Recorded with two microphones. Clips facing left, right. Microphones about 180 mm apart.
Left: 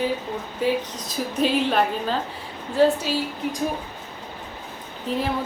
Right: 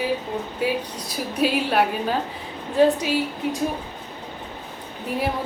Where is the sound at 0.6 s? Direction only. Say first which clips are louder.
Left 3 dB; 10° right (ahead or behind).